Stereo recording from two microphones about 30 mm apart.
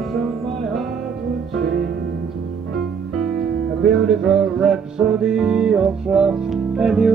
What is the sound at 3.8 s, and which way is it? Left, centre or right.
Music, centre.